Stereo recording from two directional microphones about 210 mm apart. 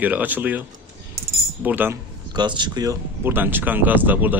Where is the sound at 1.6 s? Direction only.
10° right (ahead or behind).